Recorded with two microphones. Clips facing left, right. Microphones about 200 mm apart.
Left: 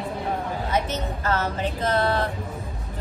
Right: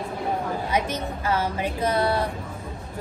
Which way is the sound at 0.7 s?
10° right (ahead or behind).